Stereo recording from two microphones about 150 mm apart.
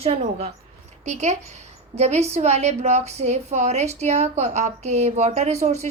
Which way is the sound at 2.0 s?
45° right (ahead or behind).